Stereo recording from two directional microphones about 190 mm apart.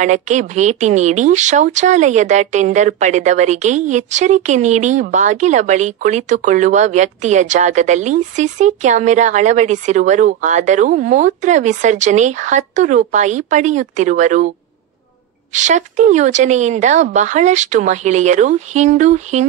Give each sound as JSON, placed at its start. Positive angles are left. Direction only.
{"t": 0.0, "sound": "speech", "side_deg": -40}
{"t": 15.5, "sound": "speech", "side_deg": -40}